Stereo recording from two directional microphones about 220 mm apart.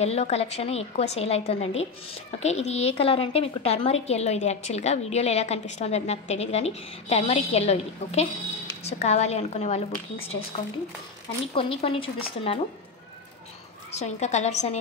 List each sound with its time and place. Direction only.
0.0 s a woman's voice: 30° left (ahead or behind)
11.5 s a woman's voice: 25° left (ahead or behind)
13.9 s a woman's voice: 30° left (ahead or behind)